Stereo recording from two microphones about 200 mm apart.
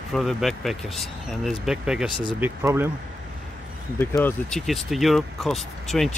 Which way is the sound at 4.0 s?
10° left (ahead or behind).